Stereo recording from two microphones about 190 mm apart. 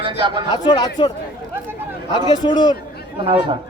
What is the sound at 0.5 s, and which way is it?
Speech, 20° left (ahead or behind).